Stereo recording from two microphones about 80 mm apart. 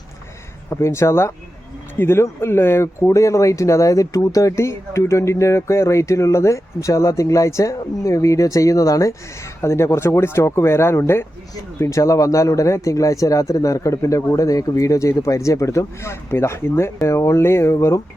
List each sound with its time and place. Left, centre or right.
0.7 s speech: left